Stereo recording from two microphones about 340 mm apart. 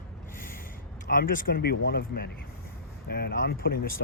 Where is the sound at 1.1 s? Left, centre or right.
Left.